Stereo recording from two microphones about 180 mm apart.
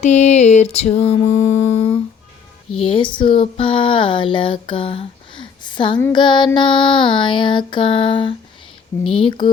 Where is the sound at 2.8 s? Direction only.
30° left (ahead or behind).